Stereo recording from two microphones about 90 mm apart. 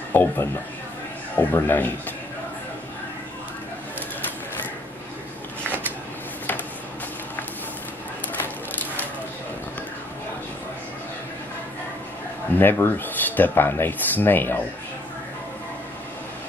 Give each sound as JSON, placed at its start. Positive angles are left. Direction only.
{"t": 0.1, "sound": "a man's voice", "side_deg": 25}
{"t": 8.4, "sound": "a sound", "side_deg": 20}
{"t": 12.5, "sound": "speech", "side_deg": 25}